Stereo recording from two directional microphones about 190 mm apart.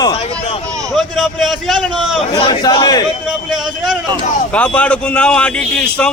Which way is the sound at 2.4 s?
25° left (ahead or behind).